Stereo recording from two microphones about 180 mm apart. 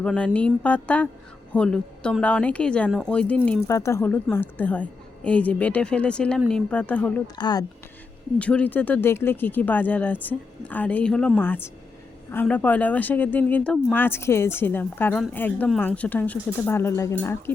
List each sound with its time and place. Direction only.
0.0 s a sound: 5° left (ahead or behind)
0.3 s a woman's voice: 5° left (ahead or behind)
7.3 s speech: 25° left (ahead or behind)
8.4 s a woman's voice: 5° left (ahead or behind)